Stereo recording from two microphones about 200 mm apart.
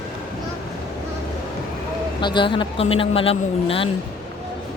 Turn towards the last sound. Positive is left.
turn(degrees=30)  # may be behind; listen again after turning